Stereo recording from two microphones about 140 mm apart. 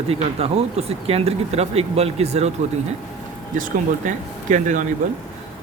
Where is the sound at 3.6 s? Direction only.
65° right (ahead or behind).